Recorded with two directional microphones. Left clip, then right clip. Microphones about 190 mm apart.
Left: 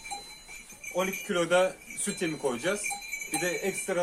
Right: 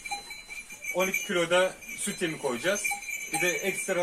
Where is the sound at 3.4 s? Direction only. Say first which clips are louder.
Right 3 dB; 20° left (ahead or behind).